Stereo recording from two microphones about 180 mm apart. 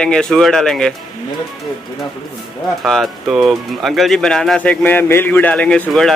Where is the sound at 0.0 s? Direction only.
5° left (ahead or behind).